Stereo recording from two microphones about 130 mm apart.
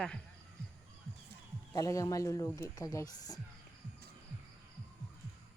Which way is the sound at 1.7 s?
25° left (ahead or behind).